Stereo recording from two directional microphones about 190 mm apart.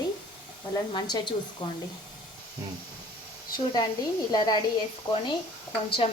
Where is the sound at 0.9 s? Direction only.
25° left (ahead or behind).